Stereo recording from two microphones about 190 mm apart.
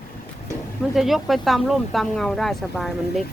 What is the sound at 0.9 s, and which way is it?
Speech, centre (ahead or behind).